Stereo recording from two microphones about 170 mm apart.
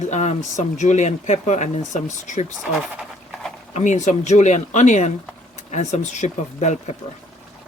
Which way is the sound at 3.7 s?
45° left (ahead or behind).